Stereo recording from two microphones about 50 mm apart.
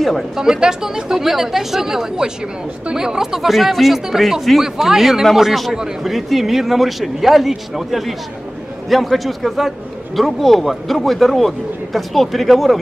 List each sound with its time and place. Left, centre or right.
0.4 s a man's voice: centre